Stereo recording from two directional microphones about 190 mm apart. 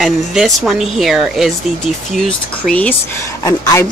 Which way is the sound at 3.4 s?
20° left (ahead or behind).